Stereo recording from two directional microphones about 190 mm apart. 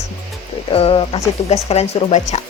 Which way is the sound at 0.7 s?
30° left (ahead or behind).